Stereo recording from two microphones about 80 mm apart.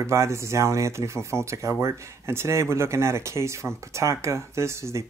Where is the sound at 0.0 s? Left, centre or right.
Right.